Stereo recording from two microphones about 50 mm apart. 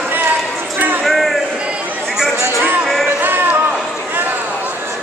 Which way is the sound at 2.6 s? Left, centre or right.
Right.